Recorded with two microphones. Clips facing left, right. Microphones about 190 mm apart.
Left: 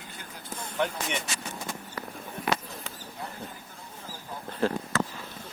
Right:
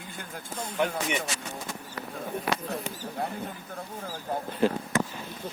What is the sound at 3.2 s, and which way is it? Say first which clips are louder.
Speech: right 7 dB; 55° right (ahead or behind).